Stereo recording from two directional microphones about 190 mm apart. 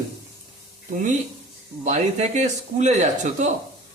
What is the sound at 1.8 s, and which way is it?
Speech, 40° right (ahead or behind).